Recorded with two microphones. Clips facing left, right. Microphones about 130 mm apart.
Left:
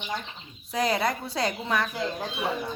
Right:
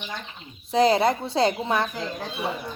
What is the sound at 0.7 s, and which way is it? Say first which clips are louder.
Speech: right 7 dB; 30° right (ahead or behind).